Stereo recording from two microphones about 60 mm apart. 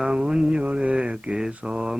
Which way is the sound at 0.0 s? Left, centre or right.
Centre.